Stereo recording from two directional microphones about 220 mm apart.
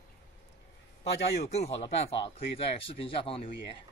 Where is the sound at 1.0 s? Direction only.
30° left (ahead or behind).